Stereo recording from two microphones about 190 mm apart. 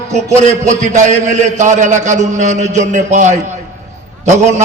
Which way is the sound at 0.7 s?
40° right (ahead or behind).